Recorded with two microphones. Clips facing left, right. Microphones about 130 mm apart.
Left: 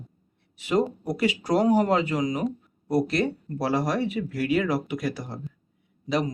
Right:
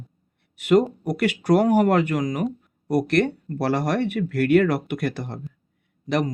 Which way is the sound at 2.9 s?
70° right (ahead or behind).